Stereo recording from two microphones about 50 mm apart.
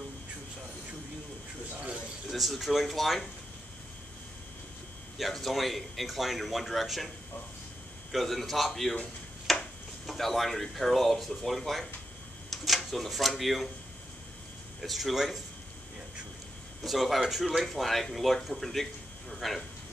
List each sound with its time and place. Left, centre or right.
1.7 s a sound: right
2.2 s speech: centre
5.1 s speech: centre
8.1 s speech: centre
14.8 s speech: centre
16.8 s speech: centre